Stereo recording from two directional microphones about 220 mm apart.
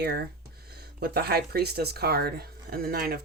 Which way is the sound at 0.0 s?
45° right (ahead or behind).